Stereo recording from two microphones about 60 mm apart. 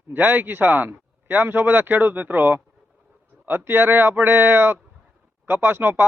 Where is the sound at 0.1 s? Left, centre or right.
Right.